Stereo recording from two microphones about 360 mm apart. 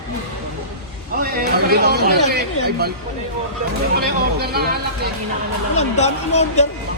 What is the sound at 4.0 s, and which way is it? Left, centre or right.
Speech, right.